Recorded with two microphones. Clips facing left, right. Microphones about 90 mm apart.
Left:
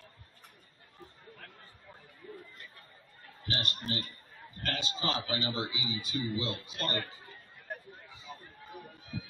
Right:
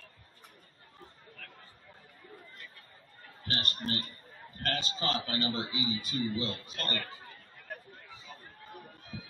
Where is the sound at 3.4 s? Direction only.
40° right (ahead or behind).